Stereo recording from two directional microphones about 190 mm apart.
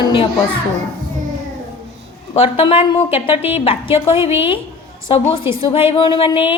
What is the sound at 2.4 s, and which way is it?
A woman's voice, 30° left (ahead or behind).